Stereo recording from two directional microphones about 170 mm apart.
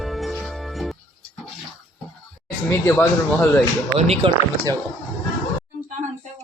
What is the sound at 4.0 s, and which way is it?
Speech, 40° right (ahead or behind).